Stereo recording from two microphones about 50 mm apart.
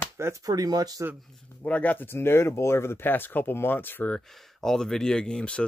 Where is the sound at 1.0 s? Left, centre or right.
Right.